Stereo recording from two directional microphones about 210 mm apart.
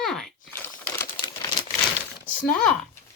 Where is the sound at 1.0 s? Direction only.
20° left (ahead or behind).